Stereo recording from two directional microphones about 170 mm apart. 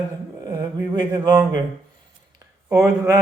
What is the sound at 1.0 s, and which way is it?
Speech, 25° right (ahead or behind).